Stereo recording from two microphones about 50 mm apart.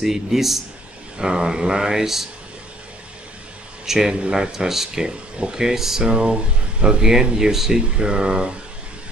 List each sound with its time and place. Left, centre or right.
0.0 s speech: centre
3.8 s speech: centre